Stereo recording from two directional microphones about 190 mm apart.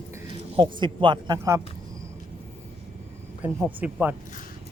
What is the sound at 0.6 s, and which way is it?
Speech, 25° right (ahead or behind).